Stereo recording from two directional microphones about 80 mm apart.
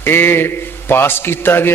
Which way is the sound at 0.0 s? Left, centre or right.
Left.